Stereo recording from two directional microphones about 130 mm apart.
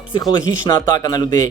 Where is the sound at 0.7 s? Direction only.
30° left (ahead or behind).